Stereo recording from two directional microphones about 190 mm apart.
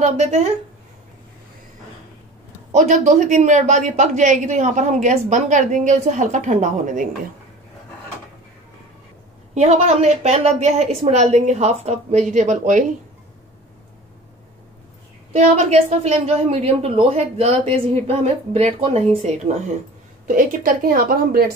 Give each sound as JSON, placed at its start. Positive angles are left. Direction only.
{"t": 0.0, "sound": "speech", "side_deg": -35}
{"t": 2.7, "sound": "speech", "side_deg": -40}
{"t": 9.5, "sound": "speech", "side_deg": -35}
{"t": 15.3, "sound": "speech", "side_deg": -35}
{"t": 20.2, "sound": "a woman's voice", "side_deg": -45}